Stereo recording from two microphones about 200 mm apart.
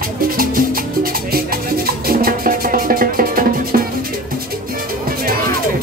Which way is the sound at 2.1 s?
45° right (ahead or behind).